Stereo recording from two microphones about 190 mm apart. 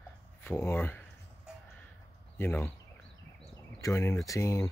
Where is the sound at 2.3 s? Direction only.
10° left (ahead or behind).